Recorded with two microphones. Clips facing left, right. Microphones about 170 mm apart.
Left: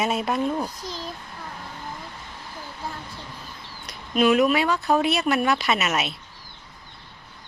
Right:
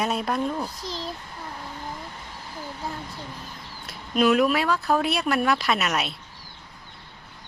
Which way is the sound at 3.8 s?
Centre (ahead or behind).